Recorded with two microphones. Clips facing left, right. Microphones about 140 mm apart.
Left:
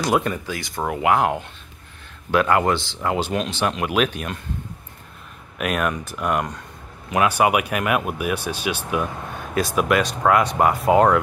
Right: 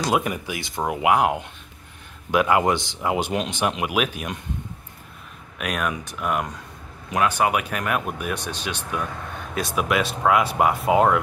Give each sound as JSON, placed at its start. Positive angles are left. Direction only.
{"t": 0.1, "sound": "speech", "side_deg": -15}
{"t": 5.6, "sound": "speech", "side_deg": 0}